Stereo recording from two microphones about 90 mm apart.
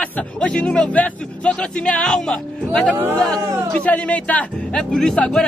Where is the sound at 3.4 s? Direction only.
35° right (ahead or behind).